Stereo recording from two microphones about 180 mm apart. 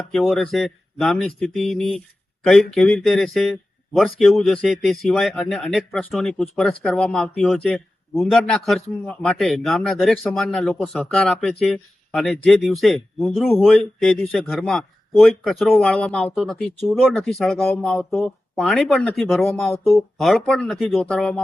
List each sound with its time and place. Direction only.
0.1 s speech: centre (ahead or behind)